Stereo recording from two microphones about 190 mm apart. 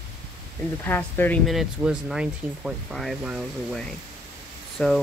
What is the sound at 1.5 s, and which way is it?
Speech, centre (ahead or behind).